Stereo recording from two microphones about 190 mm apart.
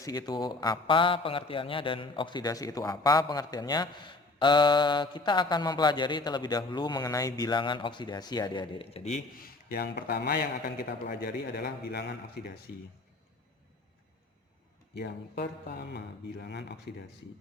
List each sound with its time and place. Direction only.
0.0 s a man's voice: 20° left (ahead or behind); by 12.5 s 55° left (ahead or behind)
14.9 s speech: 60° left (ahead or behind)